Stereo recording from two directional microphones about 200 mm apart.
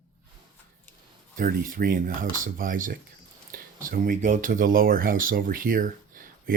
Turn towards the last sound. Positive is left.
turn(degrees=-45)  # may be behind; listen again after turning